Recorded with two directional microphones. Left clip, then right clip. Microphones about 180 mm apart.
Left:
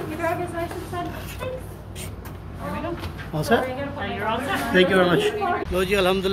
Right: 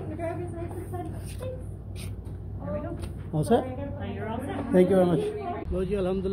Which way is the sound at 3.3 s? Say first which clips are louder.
Left 3 dB; 35° right (ahead or behind).